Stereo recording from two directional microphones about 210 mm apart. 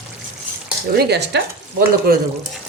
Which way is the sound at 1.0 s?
50° right (ahead or behind).